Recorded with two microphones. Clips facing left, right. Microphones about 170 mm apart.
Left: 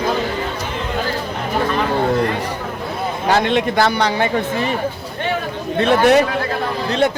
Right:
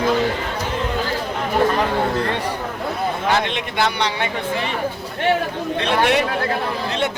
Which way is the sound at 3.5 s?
40° left (ahead or behind).